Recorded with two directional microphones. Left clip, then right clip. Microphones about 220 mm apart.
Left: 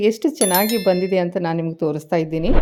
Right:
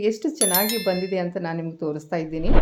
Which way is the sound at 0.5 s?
Centre (ahead or behind).